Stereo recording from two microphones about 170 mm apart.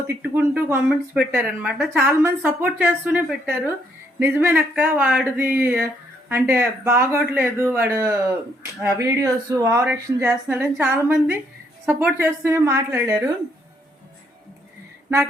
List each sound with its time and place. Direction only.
0.1 s a woman's voice: 10° right (ahead or behind)